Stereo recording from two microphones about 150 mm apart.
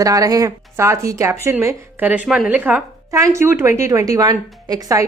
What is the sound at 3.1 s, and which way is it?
Speech, 20° right (ahead or behind).